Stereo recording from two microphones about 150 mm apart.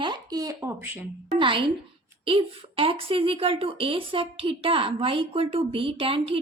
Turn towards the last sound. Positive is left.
turn(degrees=-40)  # may be behind; listen again after turning